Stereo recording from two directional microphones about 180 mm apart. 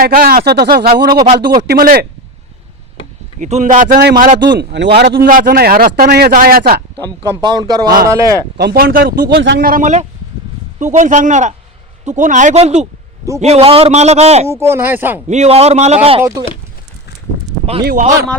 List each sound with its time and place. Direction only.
0.0 s speech: 55° right (ahead or behind)
1.1 s speech: 25° right (ahead or behind)
1.6 s speech: 55° right (ahead or behind)
3.4 s speech: 45° right (ahead or behind)
4.5 s speech: 80° right
4.9 s speech: 65° right (ahead or behind)
5.3 s speech: 55° right (ahead or behind)
7.4 s speech: 20° right (ahead or behind)
8.5 s speech: 60° right (ahead or behind)
9.3 s a man's voice: 65° right (ahead or behind); by 14.4 s 35° right (ahead or behind)
14.4 s speech: 15° right (ahead or behind)
15.3 s a man's voice: 35° right (ahead or behind)
17.8 s speech: 50° right (ahead or behind)